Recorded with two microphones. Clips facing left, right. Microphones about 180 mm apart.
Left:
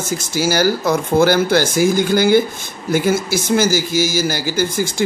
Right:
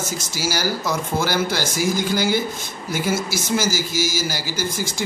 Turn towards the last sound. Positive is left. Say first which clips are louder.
# left 7 dB
turn(degrees=55)  # may be behind; listen again after turning